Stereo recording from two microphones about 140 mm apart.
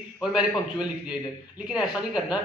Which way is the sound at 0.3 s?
5° right (ahead or behind).